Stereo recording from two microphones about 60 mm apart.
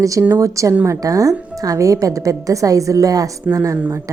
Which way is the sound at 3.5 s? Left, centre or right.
Right.